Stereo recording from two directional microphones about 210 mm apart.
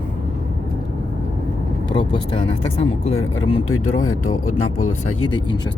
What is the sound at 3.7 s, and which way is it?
Speech, 90° left.